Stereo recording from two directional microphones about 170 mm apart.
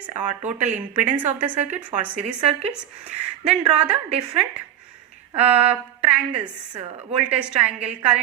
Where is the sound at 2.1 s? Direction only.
40° right (ahead or behind).